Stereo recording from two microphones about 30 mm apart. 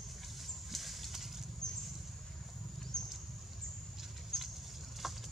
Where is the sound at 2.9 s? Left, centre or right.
Centre.